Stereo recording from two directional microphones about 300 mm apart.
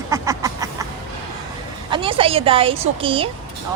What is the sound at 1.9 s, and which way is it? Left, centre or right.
Speech, centre.